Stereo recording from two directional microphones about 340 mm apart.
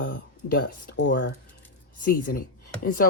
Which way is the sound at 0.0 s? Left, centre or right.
Left.